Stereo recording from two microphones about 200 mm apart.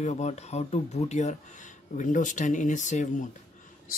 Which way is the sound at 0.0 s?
35° left (ahead or behind).